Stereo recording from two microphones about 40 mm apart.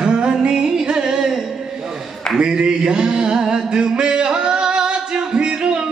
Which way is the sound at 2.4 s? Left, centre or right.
Right.